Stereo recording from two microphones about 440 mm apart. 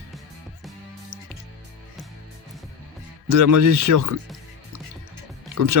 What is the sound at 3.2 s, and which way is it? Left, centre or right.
Speech, right.